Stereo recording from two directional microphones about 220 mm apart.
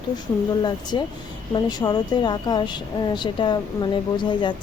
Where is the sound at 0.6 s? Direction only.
20° left (ahead or behind).